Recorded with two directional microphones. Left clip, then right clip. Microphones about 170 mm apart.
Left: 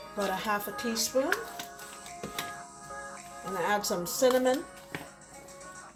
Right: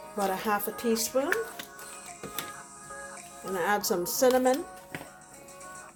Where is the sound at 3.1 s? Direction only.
45° right (ahead or behind).